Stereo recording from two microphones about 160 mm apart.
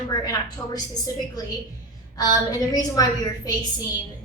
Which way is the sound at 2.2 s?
25° left (ahead or behind).